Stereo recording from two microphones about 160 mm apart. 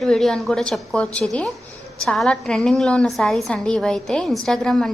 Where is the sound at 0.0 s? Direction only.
Centre (ahead or behind).